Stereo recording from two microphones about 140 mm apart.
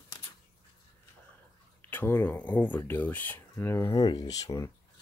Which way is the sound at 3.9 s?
30° left (ahead or behind).